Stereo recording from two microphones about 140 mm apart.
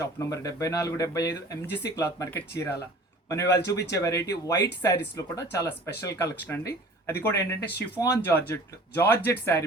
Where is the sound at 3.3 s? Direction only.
25° left (ahead or behind).